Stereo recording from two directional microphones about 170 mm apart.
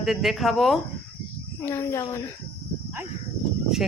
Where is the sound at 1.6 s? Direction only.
15° left (ahead or behind).